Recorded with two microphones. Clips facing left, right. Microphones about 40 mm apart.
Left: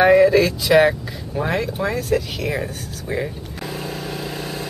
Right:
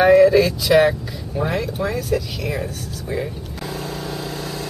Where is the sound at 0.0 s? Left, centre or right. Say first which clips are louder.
Right 1 dB; centre.